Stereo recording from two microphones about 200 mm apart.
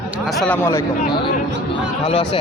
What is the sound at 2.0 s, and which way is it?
Speech, 30° left (ahead or behind).